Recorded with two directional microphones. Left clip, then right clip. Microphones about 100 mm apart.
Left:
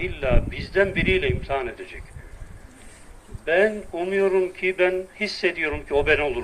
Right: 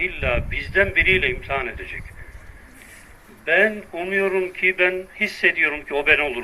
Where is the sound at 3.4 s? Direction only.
25° left (ahead or behind).